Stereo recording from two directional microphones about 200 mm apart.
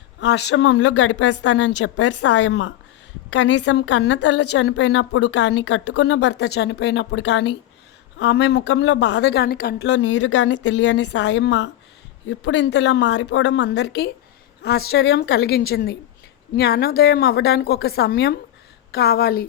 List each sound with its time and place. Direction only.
0.2 s a woman's voice: 60° left (ahead or behind)
3.2 s a woman's voice: 90° left; by 19.5 s 50° left (ahead or behind)